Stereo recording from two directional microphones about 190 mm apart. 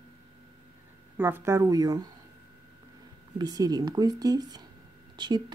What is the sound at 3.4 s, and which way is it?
A woman's voice, 20° right (ahead or behind).